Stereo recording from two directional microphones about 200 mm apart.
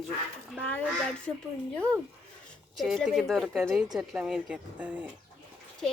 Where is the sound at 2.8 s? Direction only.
Centre (ahead or behind).